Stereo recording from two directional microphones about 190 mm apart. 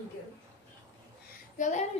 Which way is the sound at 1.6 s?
40° left (ahead or behind).